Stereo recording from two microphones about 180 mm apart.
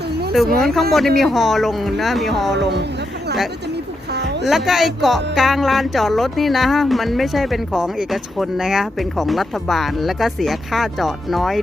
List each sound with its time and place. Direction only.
0.6 s speech: centre (ahead or behind)
4.4 s speech: centre (ahead or behind)